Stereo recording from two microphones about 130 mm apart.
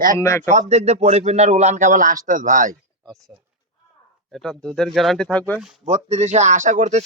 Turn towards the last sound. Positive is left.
turn(degrees=-65)  # may be behind; listen again after turning